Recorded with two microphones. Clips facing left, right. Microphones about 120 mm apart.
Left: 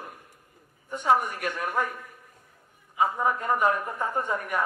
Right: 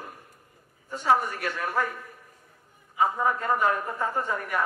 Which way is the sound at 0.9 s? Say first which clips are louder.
Even; 15° left (ahead or behind).